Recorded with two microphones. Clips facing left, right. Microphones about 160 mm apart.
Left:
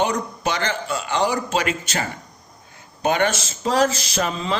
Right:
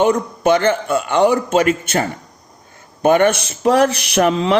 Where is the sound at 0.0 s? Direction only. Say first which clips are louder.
Right 7 dB; 50° right (ahead or behind).